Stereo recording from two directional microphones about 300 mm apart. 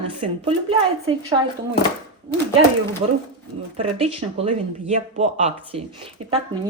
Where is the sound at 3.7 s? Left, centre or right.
Centre.